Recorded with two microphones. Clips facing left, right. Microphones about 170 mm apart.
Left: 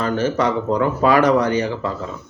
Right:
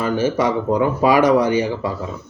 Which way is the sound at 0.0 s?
10° right (ahead or behind).